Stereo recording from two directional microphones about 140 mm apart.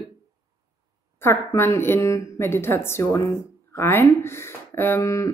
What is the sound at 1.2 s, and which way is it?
A woman's voice, 15° left (ahead or behind).